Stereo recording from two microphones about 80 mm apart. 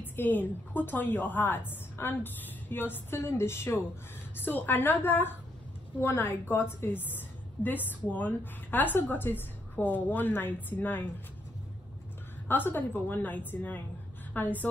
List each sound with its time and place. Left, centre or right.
0.0 s a woman's voice: left
12.4 s a woman's voice: left